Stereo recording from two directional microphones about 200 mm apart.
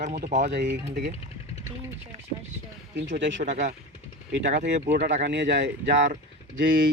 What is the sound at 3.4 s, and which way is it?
Speech, 40° right (ahead or behind).